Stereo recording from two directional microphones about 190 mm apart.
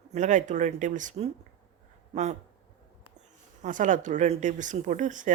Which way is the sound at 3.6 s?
40° right (ahead or behind).